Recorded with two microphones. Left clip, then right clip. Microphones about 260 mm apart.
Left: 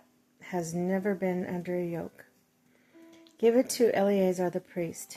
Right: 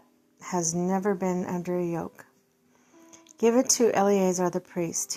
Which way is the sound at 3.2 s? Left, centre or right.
Centre.